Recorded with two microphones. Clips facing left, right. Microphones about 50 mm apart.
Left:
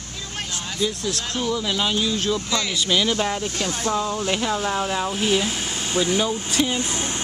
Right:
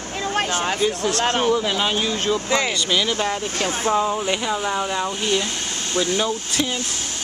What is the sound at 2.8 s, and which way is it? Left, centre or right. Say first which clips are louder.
Speech: even; centre.